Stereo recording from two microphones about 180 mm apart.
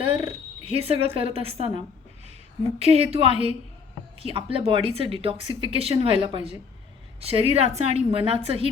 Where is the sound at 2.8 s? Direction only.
35° right (ahead or behind).